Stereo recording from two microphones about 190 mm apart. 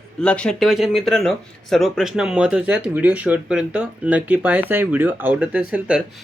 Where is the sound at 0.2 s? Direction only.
5° left (ahead or behind).